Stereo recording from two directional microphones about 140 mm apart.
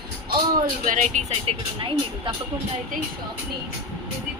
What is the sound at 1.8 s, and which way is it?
Speech, 35° right (ahead or behind).